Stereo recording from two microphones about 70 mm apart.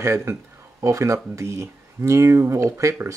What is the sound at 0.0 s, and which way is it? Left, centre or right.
Speech, right.